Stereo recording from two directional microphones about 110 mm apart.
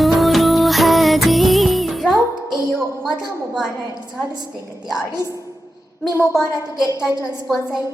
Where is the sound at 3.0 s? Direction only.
Centre (ahead or behind).